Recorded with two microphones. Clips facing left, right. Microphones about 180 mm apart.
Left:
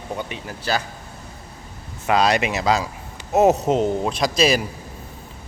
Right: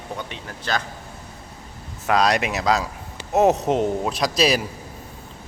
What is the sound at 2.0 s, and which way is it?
Speech, centre (ahead or behind).